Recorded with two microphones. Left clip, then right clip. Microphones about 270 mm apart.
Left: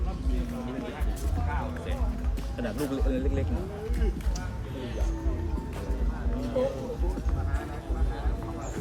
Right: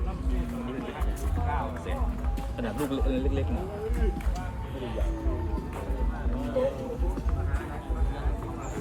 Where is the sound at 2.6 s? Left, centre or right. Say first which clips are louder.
Even; centre.